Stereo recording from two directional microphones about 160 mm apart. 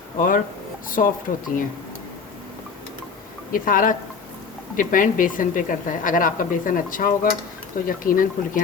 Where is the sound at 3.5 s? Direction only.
60° left (ahead or behind).